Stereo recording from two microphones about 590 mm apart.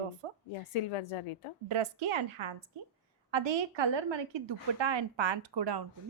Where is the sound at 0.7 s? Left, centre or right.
Left.